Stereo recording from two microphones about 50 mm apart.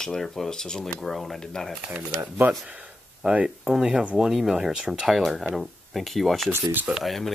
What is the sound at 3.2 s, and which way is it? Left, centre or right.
Speech, centre.